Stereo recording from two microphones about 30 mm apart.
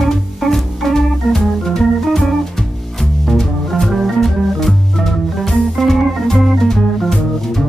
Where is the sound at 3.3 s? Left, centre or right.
Left.